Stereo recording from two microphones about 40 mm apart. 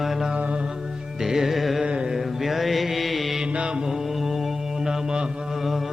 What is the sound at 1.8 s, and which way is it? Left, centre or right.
Mantra, right.